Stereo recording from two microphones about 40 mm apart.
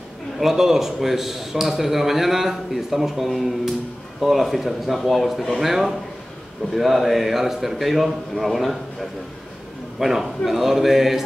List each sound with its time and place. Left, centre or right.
0.4 s a man's voice: centre
9.9 s speech: centre